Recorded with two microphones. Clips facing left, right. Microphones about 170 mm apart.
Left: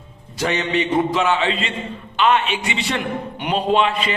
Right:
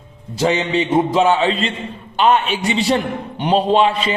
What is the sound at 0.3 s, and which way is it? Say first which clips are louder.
A man's voice: right 4 dB; 30° right (ahead or behind).